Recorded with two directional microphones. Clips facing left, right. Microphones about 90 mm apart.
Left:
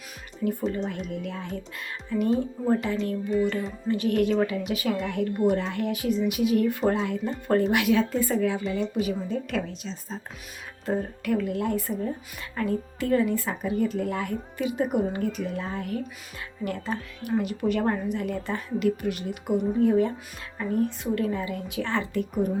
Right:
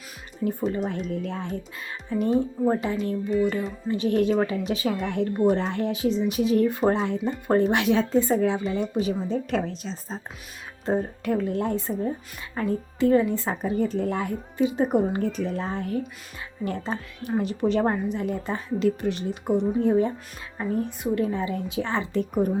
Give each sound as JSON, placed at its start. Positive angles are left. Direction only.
{"t": 0.4, "sound": "speech", "side_deg": -15}
{"t": 0.9, "sound": "a woman's voice", "side_deg": -35}
{"t": 3.4, "sound": "speech", "side_deg": -10}
{"t": 3.8, "sound": "a woman's voice", "side_deg": -20}